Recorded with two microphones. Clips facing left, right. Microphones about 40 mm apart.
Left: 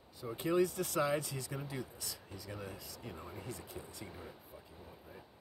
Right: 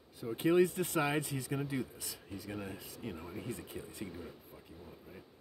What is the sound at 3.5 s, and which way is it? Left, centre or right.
Speech, centre.